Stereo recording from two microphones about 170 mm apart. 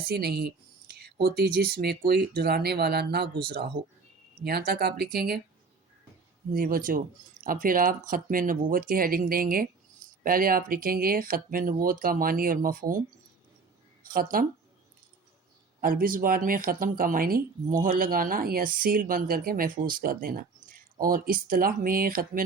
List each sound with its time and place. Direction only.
0.1 s speech: 70° right (ahead or behind)
4.4 s speech: 65° right (ahead or behind)
6.5 s speech: 55° right (ahead or behind)
14.0 s speech: 55° right (ahead or behind)
15.8 s speech: 55° right (ahead or behind)